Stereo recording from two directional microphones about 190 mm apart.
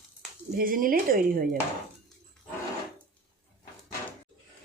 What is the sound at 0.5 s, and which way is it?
Speech, 50° right (ahead or behind).